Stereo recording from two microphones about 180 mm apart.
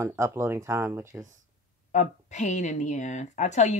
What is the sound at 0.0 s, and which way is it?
Speech, 15° right (ahead or behind).